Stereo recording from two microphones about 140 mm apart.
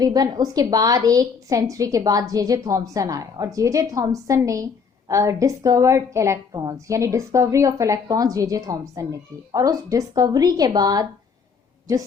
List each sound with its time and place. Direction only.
0.0 s a woman's voice: 30° right (ahead or behind)